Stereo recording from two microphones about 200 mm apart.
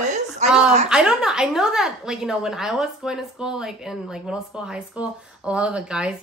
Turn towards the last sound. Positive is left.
turn(degrees=-5)  # may be behind; listen again after turning